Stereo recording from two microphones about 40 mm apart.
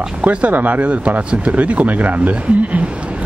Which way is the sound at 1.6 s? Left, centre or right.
Right.